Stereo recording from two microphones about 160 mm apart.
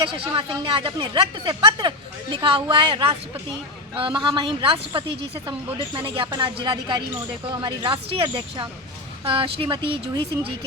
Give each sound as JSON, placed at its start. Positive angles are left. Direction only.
{"t": 0.0, "sound": "a woman's voice", "side_deg": -30}